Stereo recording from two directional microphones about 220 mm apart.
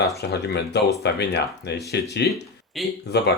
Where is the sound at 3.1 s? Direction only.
50° left (ahead or behind).